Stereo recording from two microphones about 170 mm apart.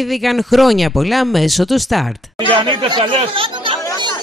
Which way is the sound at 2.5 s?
30° right (ahead or behind).